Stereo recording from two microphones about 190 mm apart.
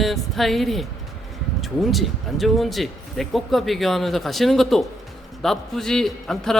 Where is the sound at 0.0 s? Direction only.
Centre (ahead or behind).